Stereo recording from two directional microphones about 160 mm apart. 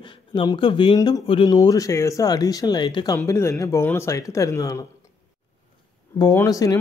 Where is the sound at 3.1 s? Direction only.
15° left (ahead or behind).